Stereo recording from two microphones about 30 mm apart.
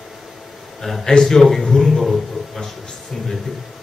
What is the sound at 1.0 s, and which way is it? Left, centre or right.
Speech, centre.